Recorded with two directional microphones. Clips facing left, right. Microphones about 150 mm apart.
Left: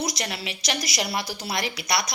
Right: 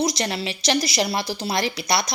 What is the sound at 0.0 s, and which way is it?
A woman's voice, 25° right (ahead or behind).